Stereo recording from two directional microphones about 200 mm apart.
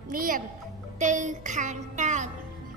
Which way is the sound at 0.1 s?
45° right (ahead or behind).